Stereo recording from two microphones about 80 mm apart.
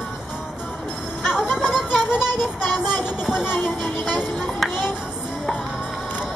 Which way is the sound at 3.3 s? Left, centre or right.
Centre.